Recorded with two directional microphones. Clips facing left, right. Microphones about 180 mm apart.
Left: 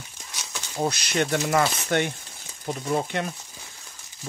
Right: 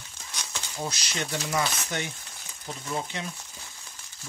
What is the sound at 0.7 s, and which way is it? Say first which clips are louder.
Speech: left 9 dB; 60° left (ahead or behind).